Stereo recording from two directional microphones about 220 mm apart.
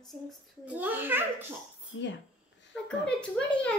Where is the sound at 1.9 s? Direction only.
55° left (ahead or behind).